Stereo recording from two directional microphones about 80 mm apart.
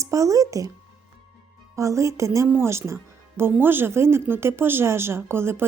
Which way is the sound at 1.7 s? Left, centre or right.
Right.